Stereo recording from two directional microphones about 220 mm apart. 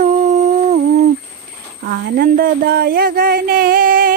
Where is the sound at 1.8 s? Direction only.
45° right (ahead or behind).